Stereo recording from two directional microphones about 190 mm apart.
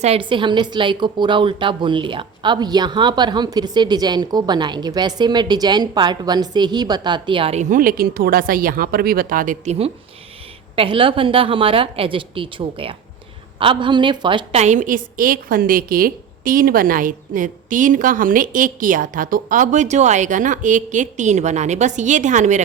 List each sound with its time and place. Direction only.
0.0 s a woman's voice: 30° right (ahead or behind)